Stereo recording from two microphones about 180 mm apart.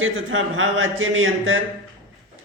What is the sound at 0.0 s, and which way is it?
A man's voice, 90° right.